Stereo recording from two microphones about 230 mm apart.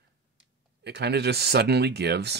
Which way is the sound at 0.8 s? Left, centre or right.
Right.